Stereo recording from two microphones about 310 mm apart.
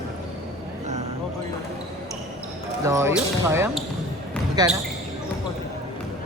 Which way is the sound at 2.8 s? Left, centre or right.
Centre.